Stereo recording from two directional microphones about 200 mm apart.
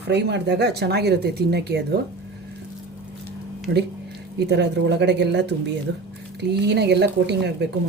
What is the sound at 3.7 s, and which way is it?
Speech, 55° right (ahead or behind).